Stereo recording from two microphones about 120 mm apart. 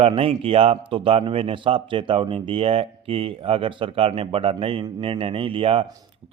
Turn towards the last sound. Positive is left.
turn(degrees=-50)  # may be behind; listen again after turning